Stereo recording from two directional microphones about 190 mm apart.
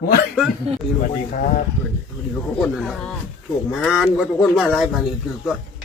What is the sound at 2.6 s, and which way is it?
Speech, centre (ahead or behind).